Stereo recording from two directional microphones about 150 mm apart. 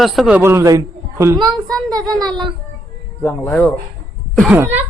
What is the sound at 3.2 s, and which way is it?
Speech, 10° left (ahead or behind).